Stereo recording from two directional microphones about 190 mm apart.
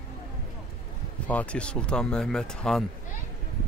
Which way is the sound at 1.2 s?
5° left (ahead or behind).